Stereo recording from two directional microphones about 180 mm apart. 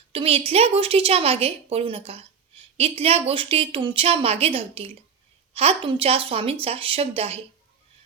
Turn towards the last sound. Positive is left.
turn(degrees=-35)  # may be behind; listen again after turning